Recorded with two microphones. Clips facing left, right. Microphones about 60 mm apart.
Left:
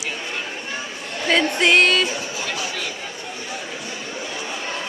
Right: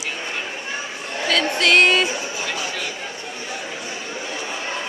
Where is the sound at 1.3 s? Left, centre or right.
Left.